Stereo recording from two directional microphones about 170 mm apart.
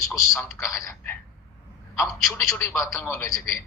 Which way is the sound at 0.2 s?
15° left (ahead or behind).